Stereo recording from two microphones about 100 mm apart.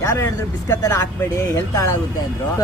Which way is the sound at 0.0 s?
35° left (ahead or behind).